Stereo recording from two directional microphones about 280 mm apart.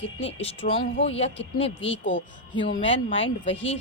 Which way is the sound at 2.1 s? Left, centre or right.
Left.